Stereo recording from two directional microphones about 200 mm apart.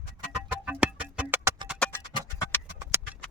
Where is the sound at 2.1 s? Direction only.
25° left (ahead or behind).